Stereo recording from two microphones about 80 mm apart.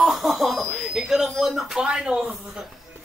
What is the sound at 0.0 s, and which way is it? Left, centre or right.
Speech, centre.